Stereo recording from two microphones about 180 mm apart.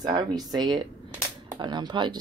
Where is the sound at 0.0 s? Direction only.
25° right (ahead or behind).